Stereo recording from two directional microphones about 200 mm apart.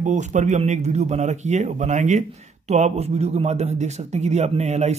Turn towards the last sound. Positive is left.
turn(degrees=-35)  # may be behind; listen again after turning